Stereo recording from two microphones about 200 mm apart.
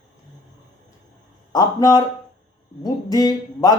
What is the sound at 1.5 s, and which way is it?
Speech, 20° left (ahead or behind).